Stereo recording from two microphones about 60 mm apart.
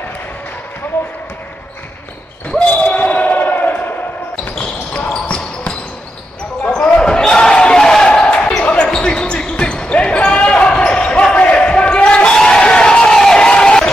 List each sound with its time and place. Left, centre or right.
2.6 s basketball bounce: left
4.6 s basketball bounce: centre